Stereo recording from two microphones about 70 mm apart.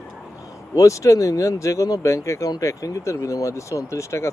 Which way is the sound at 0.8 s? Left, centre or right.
Left.